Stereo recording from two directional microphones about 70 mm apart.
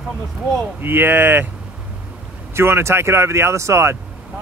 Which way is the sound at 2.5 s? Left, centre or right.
Right.